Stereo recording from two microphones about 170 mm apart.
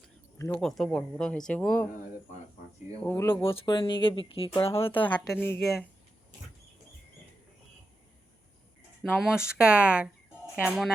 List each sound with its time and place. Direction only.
0.3 s speech: 15° left (ahead or behind)
0.6 s speech: 5° left (ahead or behind)
3.0 s speech: 10° left (ahead or behind); by 4.6 s 30° left (ahead or behind)
4.6 s speech: 15° left (ahead or behind)
9.0 s speech: centre (ahead or behind)